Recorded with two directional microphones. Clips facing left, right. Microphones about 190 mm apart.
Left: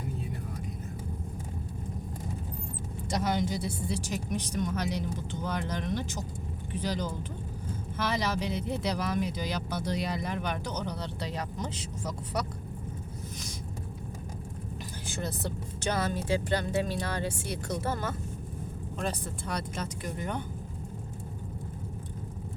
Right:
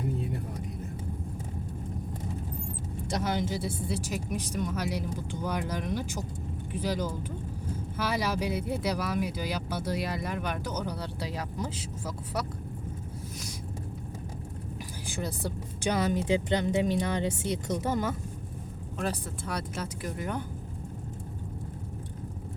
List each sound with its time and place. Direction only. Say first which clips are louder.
3.1 s speech: left 1 dB; 5° right (ahead or behind)
15.0 s speech: right 1 dB; 10° right (ahead or behind)
18.9 s speech: right 2 dB; 5° right (ahead or behind)